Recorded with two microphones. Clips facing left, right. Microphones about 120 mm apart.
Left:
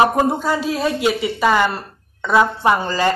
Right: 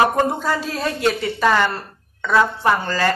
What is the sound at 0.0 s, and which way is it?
Speech, 10° left (ahead or behind).